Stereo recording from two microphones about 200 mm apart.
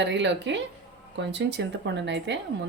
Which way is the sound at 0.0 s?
65° right (ahead or behind).